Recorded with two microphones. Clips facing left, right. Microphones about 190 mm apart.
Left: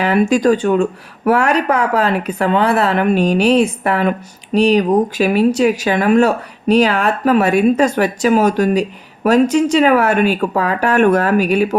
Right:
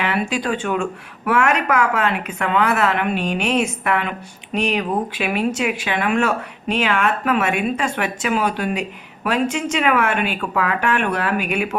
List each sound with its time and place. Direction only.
0.0 s speech: 45° left (ahead or behind)